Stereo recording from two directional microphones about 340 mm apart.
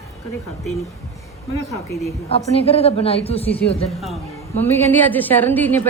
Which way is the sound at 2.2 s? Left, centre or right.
Centre.